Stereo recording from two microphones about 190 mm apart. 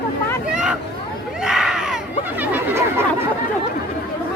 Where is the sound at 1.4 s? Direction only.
5° right (ahead or behind).